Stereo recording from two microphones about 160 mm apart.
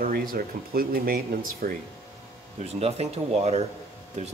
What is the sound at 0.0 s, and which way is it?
Speech, 65° right (ahead or behind).